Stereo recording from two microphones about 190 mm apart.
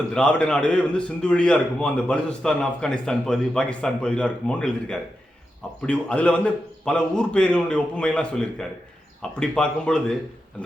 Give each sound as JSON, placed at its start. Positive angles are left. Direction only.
{"t": 0.1, "sound": "a man's voice", "side_deg": 5}